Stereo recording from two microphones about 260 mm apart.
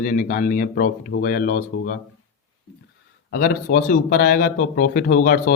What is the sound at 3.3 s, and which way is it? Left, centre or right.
Speech, left.